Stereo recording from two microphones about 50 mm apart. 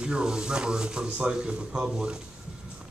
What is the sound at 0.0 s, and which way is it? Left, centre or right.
A man's voice, centre.